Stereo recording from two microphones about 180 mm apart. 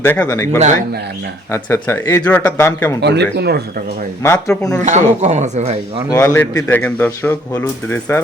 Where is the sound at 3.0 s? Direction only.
70° right (ahead or behind).